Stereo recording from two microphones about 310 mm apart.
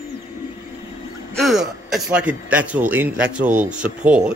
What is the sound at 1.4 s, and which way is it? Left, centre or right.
A man's voice, centre.